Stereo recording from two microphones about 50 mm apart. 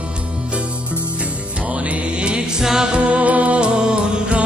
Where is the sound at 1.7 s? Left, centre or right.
Right.